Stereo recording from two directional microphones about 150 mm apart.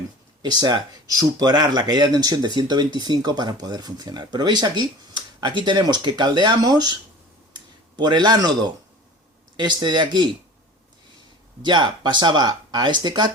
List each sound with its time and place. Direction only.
0.4 s speech: 25° right (ahead or behind)
7.5 s a sound: 30° right (ahead or behind)
9.6 s speech: 30° right (ahead or behind)
11.6 s speech: 30° right (ahead or behind)